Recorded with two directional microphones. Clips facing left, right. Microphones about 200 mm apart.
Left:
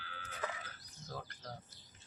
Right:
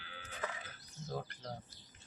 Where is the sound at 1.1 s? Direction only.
20° right (ahead or behind).